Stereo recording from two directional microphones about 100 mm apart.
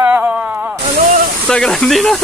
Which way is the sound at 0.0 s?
15° right (ahead or behind).